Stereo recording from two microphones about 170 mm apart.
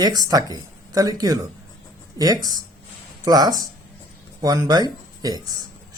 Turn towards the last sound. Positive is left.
turn(degrees=-25)  # may be behind; listen again after turning